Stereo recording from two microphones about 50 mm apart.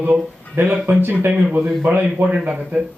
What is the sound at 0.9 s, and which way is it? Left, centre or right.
Speech, right.